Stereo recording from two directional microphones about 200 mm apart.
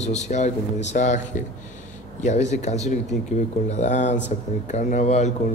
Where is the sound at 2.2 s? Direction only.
35° left (ahead or behind).